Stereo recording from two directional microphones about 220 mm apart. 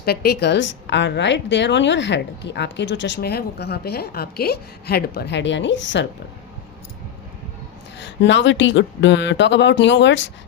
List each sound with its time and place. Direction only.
0.0 s a woman's voice: 45° left (ahead or behind)
7.9 s speech: 55° left (ahead or behind)